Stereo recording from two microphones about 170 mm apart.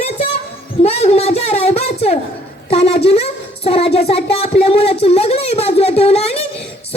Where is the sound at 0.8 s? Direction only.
40° left (ahead or behind).